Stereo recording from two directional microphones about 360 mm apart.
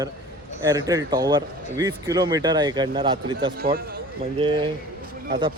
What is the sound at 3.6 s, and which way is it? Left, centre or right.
Speech, right.